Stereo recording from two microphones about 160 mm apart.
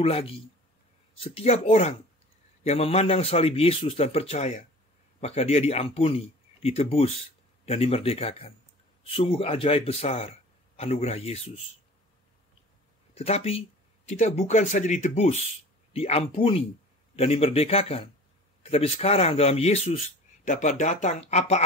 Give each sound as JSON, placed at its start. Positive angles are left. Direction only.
{"t": 0.0, "sound": "a man's voice", "side_deg": 35}
{"t": 13.1, "sound": "a man's voice", "side_deg": 40}
{"t": 20.4, "sound": "speech", "side_deg": 50}